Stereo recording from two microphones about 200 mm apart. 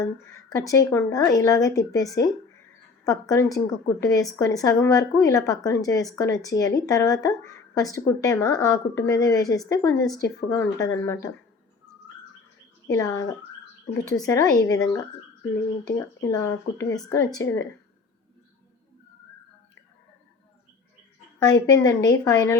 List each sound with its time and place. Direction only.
0.5 s speech: 15° left (ahead or behind)
12.9 s speech: 15° left (ahead or behind)
21.3 s speech: 20° left (ahead or behind)